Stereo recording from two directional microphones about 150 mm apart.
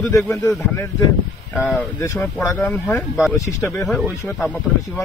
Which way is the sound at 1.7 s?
10° left (ahead or behind).